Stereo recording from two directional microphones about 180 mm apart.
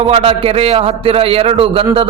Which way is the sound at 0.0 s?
35° right (ahead or behind).